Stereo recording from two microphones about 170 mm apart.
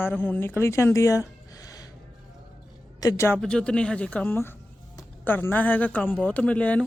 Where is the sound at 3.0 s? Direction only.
20° left (ahead or behind).